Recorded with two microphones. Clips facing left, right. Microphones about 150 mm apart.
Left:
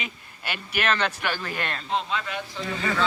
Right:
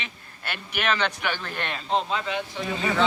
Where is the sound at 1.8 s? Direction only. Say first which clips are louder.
Right 3 dB; 35° right (ahead or behind).